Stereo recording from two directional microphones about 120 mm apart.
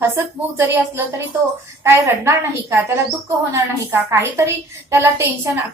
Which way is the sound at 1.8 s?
20° right (ahead or behind).